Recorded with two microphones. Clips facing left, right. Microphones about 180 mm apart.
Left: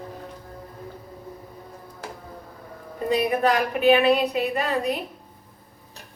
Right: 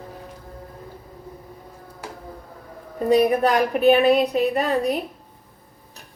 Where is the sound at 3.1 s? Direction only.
40° right (ahead or behind).